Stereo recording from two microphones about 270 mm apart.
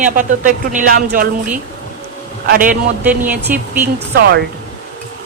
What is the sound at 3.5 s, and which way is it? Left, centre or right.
Speech, centre.